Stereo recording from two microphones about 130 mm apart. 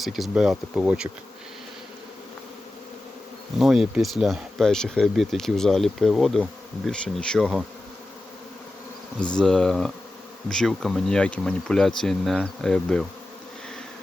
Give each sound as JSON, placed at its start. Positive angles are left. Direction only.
{"t": 0.0, "sound": "speech", "side_deg": 0}
{"t": 3.6, "sound": "speech", "side_deg": -5}
{"t": 9.4, "sound": "speech", "side_deg": 5}